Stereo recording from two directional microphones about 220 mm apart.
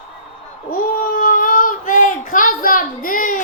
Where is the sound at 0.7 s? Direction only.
40° left (ahead or behind).